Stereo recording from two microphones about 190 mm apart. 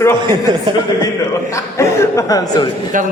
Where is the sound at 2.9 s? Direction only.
45° right (ahead or behind).